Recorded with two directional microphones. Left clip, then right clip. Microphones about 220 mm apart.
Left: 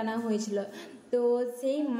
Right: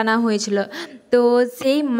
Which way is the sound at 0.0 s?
40° right (ahead or behind).